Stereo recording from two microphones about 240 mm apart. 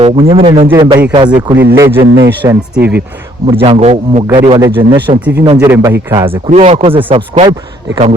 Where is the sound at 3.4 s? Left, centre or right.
Right.